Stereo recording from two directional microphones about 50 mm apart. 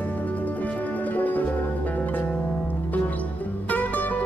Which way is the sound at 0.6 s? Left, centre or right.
Left.